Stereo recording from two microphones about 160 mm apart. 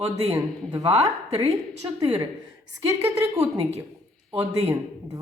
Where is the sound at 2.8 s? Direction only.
20° right (ahead or behind).